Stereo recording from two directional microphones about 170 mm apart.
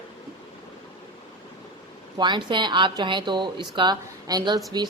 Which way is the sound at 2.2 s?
25° right (ahead or behind).